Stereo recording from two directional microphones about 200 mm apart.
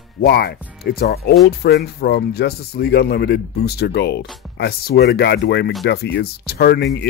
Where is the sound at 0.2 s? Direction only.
50° left (ahead or behind).